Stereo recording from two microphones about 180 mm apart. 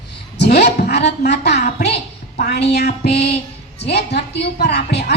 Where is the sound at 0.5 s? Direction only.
65° left (ahead or behind).